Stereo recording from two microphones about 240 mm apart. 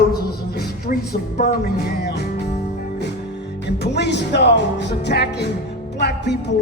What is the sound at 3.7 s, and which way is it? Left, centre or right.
A man's voice, left.